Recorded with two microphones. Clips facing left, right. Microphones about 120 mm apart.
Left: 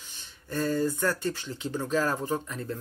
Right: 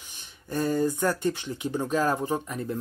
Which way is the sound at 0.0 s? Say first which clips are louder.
Right 1 dB; 15° right (ahead or behind).